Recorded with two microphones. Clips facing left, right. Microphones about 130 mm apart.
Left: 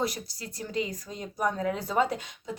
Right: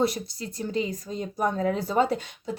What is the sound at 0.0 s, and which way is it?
Speech, 25° right (ahead or behind).